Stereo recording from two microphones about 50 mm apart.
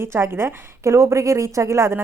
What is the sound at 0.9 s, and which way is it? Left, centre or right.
Speech, right.